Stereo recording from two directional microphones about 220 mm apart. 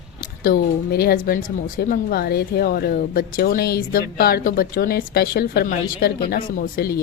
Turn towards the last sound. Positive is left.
turn(degrees=45)  # may be behind; listen again after turning